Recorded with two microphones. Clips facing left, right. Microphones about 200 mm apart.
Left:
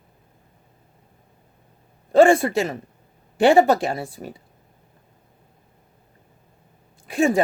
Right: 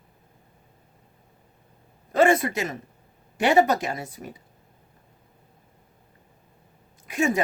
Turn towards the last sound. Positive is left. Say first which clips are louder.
# left 5 dB
turn(degrees=30)  # may be behind; listen again after turning